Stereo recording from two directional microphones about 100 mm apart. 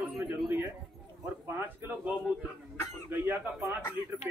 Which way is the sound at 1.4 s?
20° right (ahead or behind).